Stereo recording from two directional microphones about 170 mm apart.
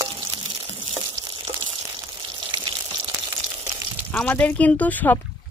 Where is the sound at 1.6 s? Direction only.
30° right (ahead or behind).